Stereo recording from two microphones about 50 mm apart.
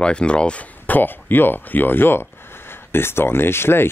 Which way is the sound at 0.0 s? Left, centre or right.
Centre.